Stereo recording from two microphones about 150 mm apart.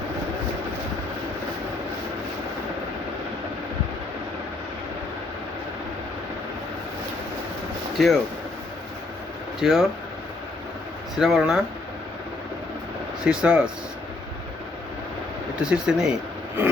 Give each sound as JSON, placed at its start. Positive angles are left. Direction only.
{"t": 8.0, "sound": "speech", "side_deg": 0}
{"t": 9.6, "sound": "speech", "side_deg": 0}
{"t": 11.2, "sound": "speech", "side_deg": 0}
{"t": 13.2, "sound": "speech", "side_deg": -5}
{"t": 15.6, "sound": "speech", "side_deg": -5}